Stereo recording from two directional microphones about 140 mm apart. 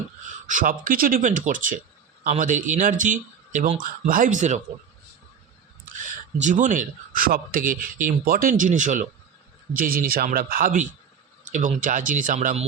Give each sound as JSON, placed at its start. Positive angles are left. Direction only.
{"t": 0.4, "sound": "speech", "side_deg": -70}
{"t": 5.8, "sound": "speech", "side_deg": -65}
{"t": 9.7, "sound": "speech", "side_deg": -80}
{"t": 11.5, "sound": "speech", "side_deg": -65}